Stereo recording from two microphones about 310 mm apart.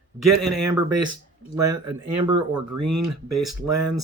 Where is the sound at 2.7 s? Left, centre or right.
Right.